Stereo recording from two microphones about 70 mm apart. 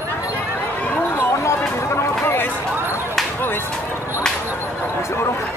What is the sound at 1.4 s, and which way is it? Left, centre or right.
Chatter, left.